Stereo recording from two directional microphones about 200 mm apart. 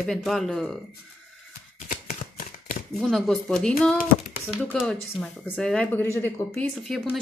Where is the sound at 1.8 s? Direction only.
40° left (ahead or behind).